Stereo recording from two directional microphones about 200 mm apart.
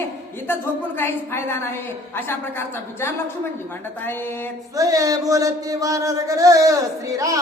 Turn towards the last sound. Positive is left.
turn(degrees=-15)  # may be behind; listen again after turning